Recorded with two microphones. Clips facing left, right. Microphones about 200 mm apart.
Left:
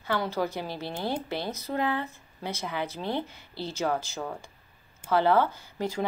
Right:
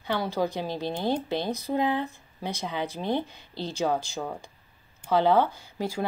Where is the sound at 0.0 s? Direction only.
15° right (ahead or behind).